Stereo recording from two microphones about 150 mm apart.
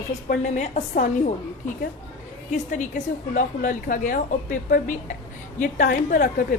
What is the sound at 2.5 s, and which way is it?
A woman's voice, 55° left (ahead or behind).